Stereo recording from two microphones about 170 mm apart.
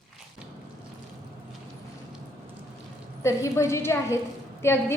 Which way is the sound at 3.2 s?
15° left (ahead or behind).